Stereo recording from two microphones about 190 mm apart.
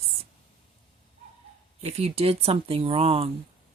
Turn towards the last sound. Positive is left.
turn(degrees=-30)  # may be behind; listen again after turning